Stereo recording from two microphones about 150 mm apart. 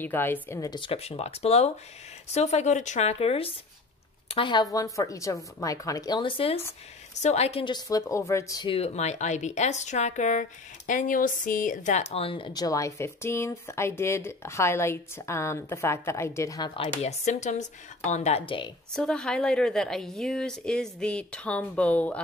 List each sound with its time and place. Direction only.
0.0 s speech: 15° left (ahead or behind); by 4.6 s 35° left (ahead or behind)
4.7 s a woman's voice: 20° left (ahead or behind); by 6.6 s 40° left (ahead or behind)
7.2 s a woman's voice: 50° left (ahead or behind); by 8.6 s 20° left (ahead or behind)
8.6 s a woman's voice: 40° left (ahead or behind)
12.6 s speech: 20° left (ahead or behind)
16.7 s speech: 40° left (ahead or behind)
18.9 s a woman's voice: 5° left (ahead or behind)